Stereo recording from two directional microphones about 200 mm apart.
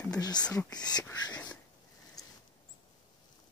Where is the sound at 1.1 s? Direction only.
20° left (ahead or behind).